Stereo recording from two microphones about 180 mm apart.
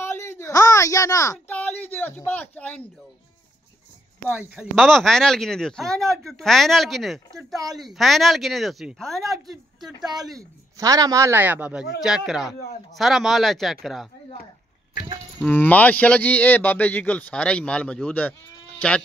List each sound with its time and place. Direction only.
0.0 s a sound: 15° left (ahead or behind)
4.3 s a man's voice: 5° right (ahead or behind)
10.8 s a man's voice: 20° right (ahead or behind); by 14.0 s centre (ahead or behind)
15.4 s speech: 10° left (ahead or behind)